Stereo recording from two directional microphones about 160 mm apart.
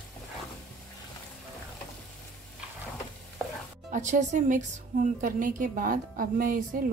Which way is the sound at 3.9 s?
50° right (ahead or behind).